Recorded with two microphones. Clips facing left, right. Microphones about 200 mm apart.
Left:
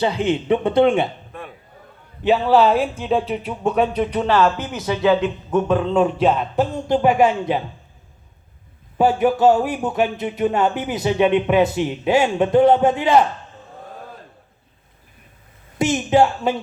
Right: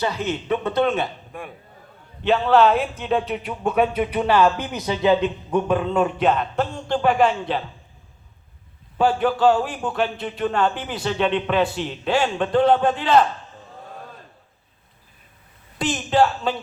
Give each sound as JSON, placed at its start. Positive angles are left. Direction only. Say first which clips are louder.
{"t": 0.0, "sound": "a man's voice", "louder": "left 5 dB", "side_deg": 15}
{"t": 1.3, "sound": "a man's voice", "louder": "even", "side_deg": -10}
{"t": 2.5, "sound": "a man's voice", "louder": "even", "side_deg": 0}
{"t": 9.0, "sound": "a man's voice", "louder": "left 3 dB", "side_deg": 10}
{"t": 15.8, "sound": "a man's voice", "louder": "left 3 dB", "side_deg": 20}